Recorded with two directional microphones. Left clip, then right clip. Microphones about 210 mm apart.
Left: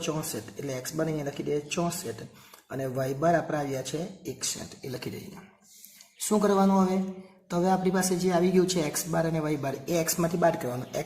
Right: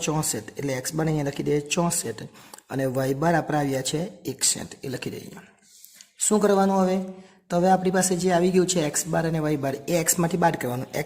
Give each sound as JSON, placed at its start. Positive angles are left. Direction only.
{"t": 0.6, "sound": "speech", "side_deg": -50}
{"t": 6.1, "sound": "speech", "side_deg": -40}